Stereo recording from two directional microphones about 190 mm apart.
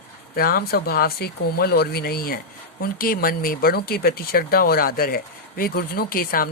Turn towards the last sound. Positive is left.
turn(degrees=50)  # may be behind; listen again after turning